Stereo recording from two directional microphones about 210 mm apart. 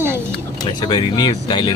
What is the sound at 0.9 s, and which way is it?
Speech, 20° left (ahead or behind).